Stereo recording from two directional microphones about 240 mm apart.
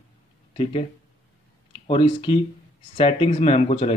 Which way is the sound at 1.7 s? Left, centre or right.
Left.